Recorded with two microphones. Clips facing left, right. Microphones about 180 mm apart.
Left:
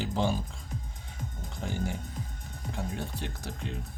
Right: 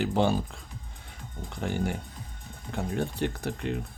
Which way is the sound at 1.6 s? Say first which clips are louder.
Right 4 dB; 65° right (ahead or behind).